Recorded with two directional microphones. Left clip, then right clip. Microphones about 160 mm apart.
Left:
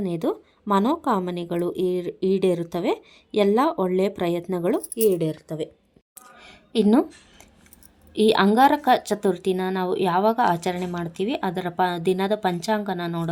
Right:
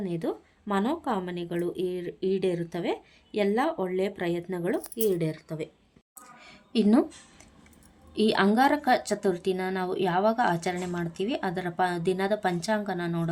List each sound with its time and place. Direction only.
0.0 s speech: 35° left (ahead or behind)
5.0 s speech: 15° left (ahead or behind)
6.4 s a sound: 20° left (ahead or behind)
8.1 s speech: 20° left (ahead or behind)